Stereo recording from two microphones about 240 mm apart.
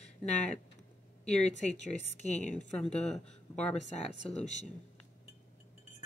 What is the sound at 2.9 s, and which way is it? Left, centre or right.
Speech, centre.